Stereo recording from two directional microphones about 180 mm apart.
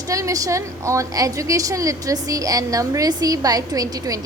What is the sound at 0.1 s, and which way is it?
A woman's voice, 20° right (ahead or behind).